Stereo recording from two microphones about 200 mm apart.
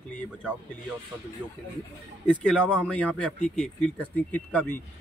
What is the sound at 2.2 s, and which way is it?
Speech, 5° left (ahead or behind).